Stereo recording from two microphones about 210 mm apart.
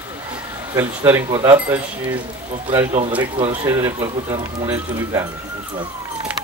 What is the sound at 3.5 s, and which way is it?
Speech, 15° right (ahead or behind).